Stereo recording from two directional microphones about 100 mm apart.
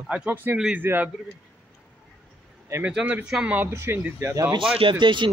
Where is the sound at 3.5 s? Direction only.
25° right (ahead or behind).